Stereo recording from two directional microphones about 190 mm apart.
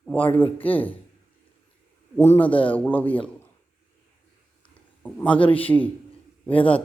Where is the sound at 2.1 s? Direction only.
10° left (ahead or behind).